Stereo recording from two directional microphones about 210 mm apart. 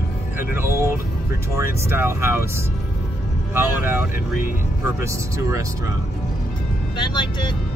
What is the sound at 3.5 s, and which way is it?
Speech, 10° right (ahead or behind).